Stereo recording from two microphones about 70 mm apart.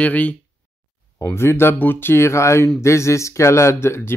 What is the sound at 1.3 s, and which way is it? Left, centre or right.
Speech, left.